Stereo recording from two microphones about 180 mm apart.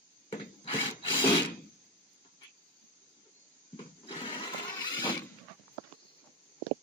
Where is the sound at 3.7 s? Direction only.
30° left (ahead or behind).